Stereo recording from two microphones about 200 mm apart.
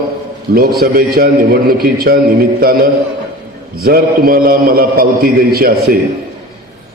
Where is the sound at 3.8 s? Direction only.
45° right (ahead or behind).